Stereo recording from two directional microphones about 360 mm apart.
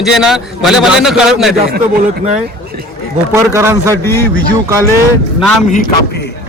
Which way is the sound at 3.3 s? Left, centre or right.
Centre.